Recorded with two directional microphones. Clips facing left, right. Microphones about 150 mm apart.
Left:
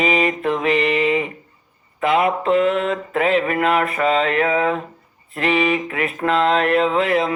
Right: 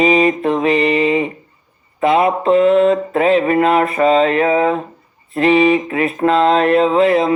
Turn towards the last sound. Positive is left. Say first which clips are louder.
# right 5 dB
turn(degrees=-30)  # may be behind; listen again after turning